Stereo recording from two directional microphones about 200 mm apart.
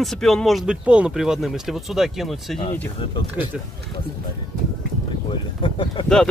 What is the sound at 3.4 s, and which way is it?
Speech, 10° right (ahead or behind).